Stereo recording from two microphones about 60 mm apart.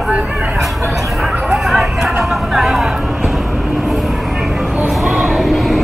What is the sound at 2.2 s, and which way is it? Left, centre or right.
Speech, centre.